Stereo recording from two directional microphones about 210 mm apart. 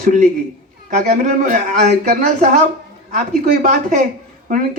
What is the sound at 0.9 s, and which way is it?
Speech, 40° right (ahead or behind).